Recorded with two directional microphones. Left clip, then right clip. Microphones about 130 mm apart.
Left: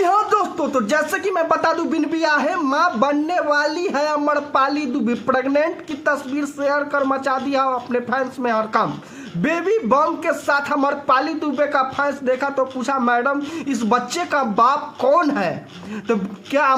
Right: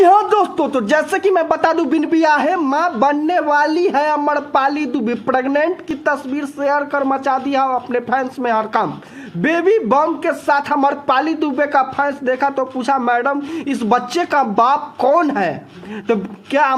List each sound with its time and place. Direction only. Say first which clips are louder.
0.0 s speech: right 6 dB; 40° right (ahead or behind)